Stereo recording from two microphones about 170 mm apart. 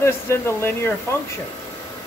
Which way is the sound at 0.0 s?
15° left (ahead or behind).